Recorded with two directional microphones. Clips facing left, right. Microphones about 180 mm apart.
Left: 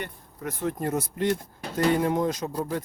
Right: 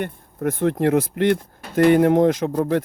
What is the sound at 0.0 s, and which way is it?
Speech, 55° right (ahead or behind).